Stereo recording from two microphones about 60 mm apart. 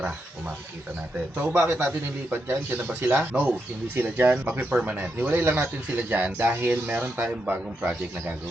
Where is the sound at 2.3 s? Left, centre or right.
Right.